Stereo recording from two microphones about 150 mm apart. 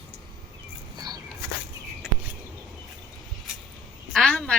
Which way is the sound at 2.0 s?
5° right (ahead or behind).